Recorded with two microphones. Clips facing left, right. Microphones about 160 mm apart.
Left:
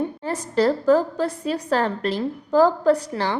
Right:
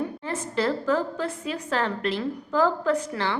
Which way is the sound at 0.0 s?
40° left (ahead or behind).